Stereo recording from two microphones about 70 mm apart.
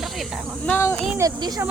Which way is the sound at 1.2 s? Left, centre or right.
Right.